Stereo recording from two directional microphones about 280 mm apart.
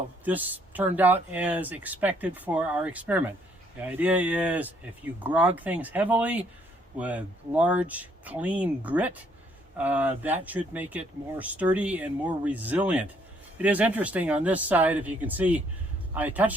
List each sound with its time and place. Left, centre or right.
0.3 s speech: centre